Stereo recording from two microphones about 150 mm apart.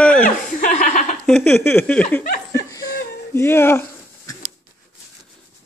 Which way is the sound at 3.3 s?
15° left (ahead or behind).